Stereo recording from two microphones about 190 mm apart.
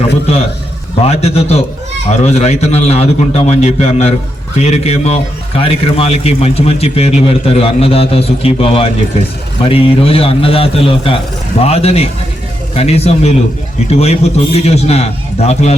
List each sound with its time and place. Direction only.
1.0 s a man's voice: 35° left (ahead or behind)